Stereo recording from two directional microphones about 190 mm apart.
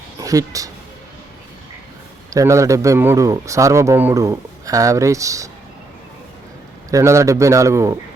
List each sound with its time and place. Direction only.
0.2 s speech: 15° right (ahead or behind)
2.3 s speech: 15° right (ahead or behind)
6.9 s speech: 15° right (ahead or behind)